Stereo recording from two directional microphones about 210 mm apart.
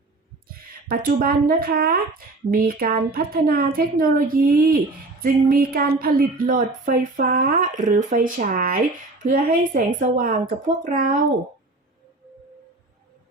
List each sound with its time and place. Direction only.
0.4 s speech: 45° right (ahead or behind)